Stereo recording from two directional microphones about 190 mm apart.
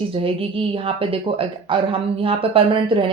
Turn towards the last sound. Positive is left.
turn(degrees=-25)  # may be behind; listen again after turning